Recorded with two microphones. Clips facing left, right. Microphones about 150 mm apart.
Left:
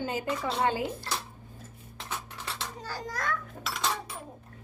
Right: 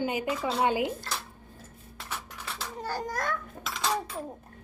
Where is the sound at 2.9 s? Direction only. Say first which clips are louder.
Right 4 dB; 50° right (ahead or behind).